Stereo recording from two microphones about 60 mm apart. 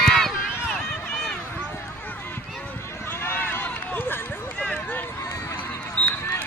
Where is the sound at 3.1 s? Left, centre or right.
Left.